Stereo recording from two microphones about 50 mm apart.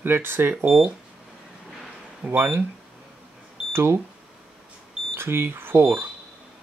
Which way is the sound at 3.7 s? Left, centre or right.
Right.